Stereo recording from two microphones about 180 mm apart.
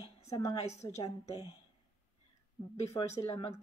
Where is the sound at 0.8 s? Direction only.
25° left (ahead or behind).